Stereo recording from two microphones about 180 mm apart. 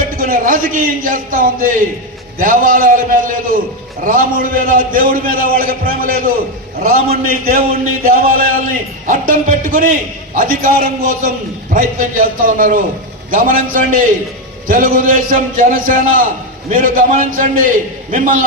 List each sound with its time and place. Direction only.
0.2 s a man's voice: 50° right (ahead or behind)